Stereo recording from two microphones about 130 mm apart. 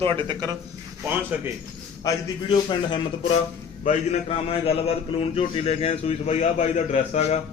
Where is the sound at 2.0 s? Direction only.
30° left (ahead or behind).